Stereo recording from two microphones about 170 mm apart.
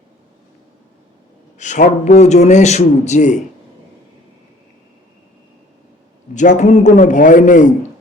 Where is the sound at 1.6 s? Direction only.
45° left (ahead or behind).